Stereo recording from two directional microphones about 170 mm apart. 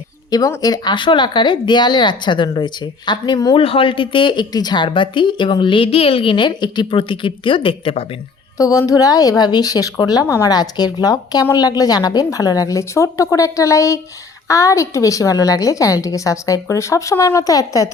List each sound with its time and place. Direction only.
0.3 s speech: 20° left (ahead or behind)
8.5 s speech: 20° left (ahead or behind)